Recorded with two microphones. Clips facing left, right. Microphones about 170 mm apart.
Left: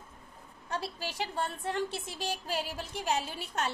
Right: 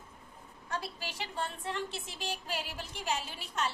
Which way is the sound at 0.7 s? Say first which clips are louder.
Left 3 dB; 35° left (ahead or behind).